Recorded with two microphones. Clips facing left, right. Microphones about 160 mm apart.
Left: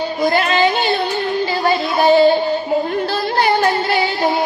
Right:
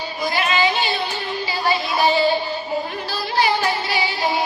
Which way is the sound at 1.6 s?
55° left (ahead or behind).